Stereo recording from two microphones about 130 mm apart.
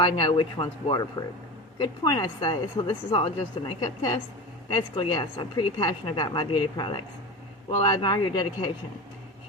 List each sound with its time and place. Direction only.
0.0 s a woman's voice: 40° left (ahead or behind)
3.8 s a woman's voice: 35° left (ahead or behind)